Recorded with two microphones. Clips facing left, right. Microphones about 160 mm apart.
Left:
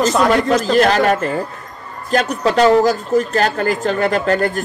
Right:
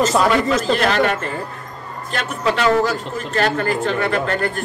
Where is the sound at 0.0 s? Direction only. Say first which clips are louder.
Left 1 dB; centre (ahead or behind).